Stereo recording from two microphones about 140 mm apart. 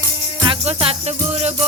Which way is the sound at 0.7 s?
45° right (ahead or behind).